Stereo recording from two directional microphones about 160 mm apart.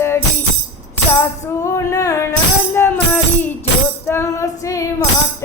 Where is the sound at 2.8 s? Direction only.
10° left (ahead or behind).